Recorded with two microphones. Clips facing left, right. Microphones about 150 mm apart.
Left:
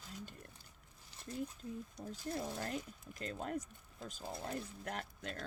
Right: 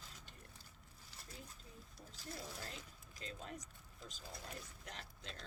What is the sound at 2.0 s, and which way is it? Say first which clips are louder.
Speech: left 8 dB; 55° left (ahead or behind).